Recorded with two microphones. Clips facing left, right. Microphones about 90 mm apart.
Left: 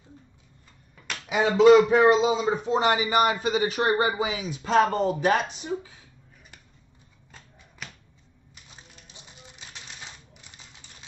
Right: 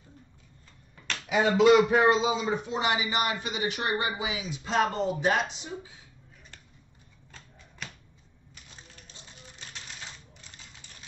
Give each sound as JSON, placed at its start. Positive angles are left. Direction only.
{"t": 1.4, "sound": "a man's voice", "side_deg": 30}
{"t": 7.2, "sound": "shuffling cards", "side_deg": 10}
{"t": 9.0, "sound": "music", "side_deg": 15}